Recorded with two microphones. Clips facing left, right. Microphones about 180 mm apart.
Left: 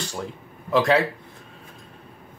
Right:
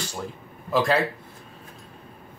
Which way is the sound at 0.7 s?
Centre (ahead or behind).